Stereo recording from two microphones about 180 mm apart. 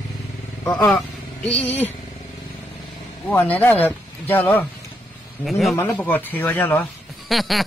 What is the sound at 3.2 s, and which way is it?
Speech, 10° left (ahead or behind).